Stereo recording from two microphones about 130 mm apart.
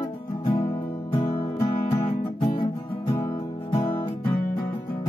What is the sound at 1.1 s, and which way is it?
Music, 40° left (ahead or behind).